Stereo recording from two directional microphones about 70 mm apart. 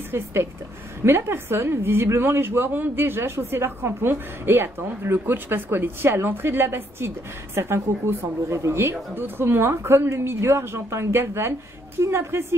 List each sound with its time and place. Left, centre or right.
0.1 s a woman's voice: right